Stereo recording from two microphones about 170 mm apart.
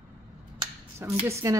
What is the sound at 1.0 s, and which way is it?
Speech, 15° right (ahead or behind).